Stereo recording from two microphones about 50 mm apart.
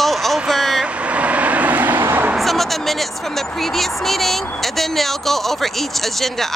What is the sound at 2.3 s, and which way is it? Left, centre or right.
Speech, centre.